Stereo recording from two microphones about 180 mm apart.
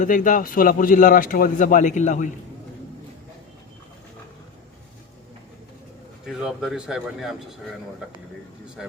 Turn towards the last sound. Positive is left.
turn(degrees=0)  # may be behind; listen again after turning